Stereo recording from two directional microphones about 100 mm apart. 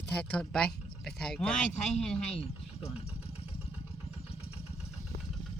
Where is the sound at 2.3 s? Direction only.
90° left.